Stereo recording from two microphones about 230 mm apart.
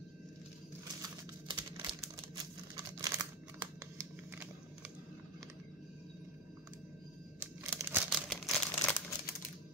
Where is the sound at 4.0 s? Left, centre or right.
Centre.